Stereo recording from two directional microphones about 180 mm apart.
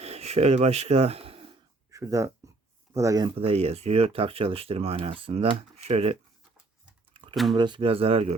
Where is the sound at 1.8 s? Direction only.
15° right (ahead or behind).